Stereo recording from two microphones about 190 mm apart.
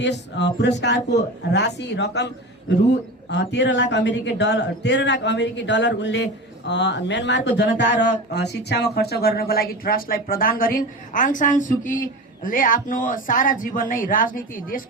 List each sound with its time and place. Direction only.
0.0 s a man's voice: 65° left (ahead or behind); by 14.8 s 45° left (ahead or behind)